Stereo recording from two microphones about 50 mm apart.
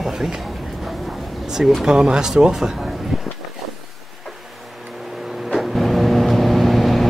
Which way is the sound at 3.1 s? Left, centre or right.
Centre.